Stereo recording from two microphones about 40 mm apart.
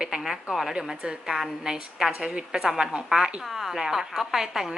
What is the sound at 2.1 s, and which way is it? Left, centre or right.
Speech, right.